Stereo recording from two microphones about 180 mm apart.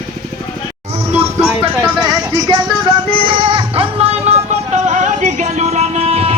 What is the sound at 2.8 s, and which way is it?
Music, 30° right (ahead or behind).